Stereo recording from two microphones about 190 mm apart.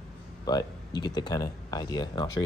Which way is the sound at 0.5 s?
20° left (ahead or behind).